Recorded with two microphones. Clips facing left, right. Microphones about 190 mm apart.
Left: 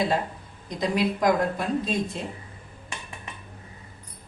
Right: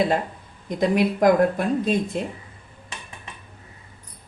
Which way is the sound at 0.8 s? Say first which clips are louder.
Right 5 dB; 55° right (ahead or behind).